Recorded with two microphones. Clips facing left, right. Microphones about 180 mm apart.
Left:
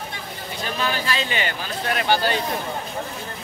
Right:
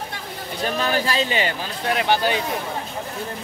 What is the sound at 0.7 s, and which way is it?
Speech, 45° right (ahead or behind).